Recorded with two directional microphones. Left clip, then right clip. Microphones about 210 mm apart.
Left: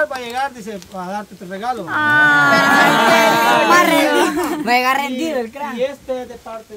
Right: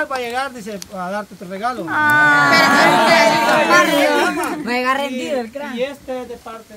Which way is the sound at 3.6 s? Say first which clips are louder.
Left 1 dB; 55° left (ahead or behind).